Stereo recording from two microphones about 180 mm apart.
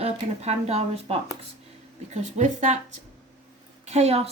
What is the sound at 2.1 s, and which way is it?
Speech, 40° right (ahead or behind).